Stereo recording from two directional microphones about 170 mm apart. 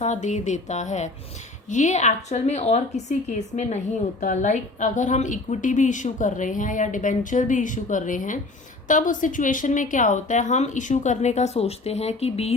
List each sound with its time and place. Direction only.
0.0 s a woman's voice: 45° left (ahead or behind)